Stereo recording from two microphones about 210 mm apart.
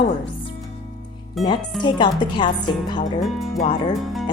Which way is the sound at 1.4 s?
20° left (ahead or behind).